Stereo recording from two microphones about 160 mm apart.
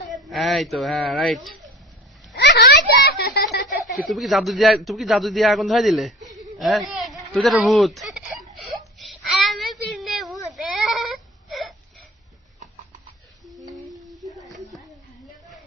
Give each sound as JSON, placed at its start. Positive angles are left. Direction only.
{"t": 0.3, "sound": "a man's voice", "side_deg": 0}
{"t": 2.3, "sound": "a child's voice", "side_deg": 90}
{"t": 4.1, "sound": "a man's voice", "side_deg": 0}
{"t": 8.5, "sound": "wail", "side_deg": 0}
{"t": 9.9, "sound": "a sound", "side_deg": 0}
{"t": 10.3, "sound": "whimper", "side_deg": 0}